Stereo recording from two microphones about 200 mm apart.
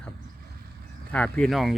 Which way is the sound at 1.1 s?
5° left (ahead or behind).